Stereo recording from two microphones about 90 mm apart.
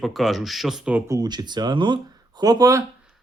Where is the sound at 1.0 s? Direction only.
45° right (ahead or behind).